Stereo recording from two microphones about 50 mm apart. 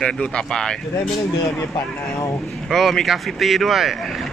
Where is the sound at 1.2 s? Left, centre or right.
Left.